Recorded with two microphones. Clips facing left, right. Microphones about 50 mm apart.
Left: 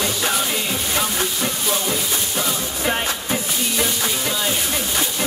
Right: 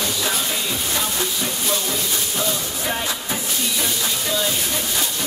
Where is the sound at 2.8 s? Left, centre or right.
Left.